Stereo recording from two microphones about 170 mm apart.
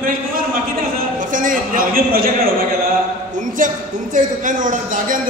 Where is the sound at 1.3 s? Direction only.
50° right (ahead or behind).